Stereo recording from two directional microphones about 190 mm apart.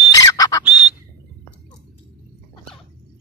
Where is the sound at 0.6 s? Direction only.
10° right (ahead or behind).